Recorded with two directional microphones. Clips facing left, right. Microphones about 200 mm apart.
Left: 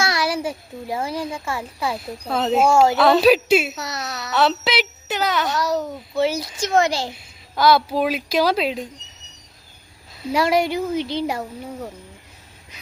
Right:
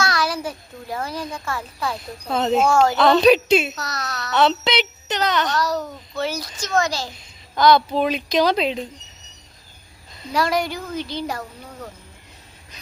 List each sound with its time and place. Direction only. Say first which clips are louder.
0.0 s a sound: left 1 dB; 25° left (ahead or behind)
1.8 s a child's voice: left 2 dB; 5° left (ahead or behind)
3.8 s speech: left 1 dB; 25° left (ahead or behind)
4.2 s a child's voice: right 1 dB; centre (ahead or behind)
5.8 s speech: left 5 dB; 25° left (ahead or behind)
7.2 s a child's voice: right 5 dB; 5° left (ahead or behind)
10.3 s speech: left 3 dB; 25° left (ahead or behind)